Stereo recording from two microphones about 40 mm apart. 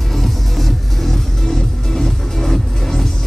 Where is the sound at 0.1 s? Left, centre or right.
Centre.